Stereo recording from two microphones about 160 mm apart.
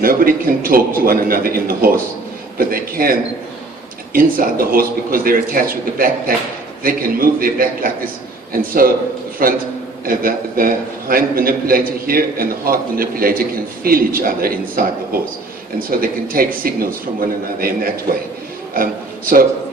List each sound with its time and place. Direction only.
0.0 s a man's voice: 65° right (ahead or behind)